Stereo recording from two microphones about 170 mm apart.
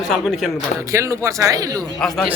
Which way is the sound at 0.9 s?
15° right (ahead or behind).